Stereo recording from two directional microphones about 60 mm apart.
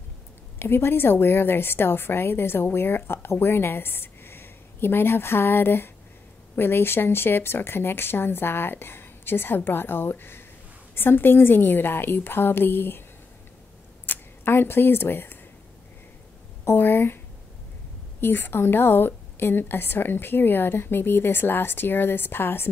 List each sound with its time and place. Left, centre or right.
0.6 s a woman's voice: left
14.0 s speech: left
16.6 s a woman's voice: left
18.2 s a woman's voice: left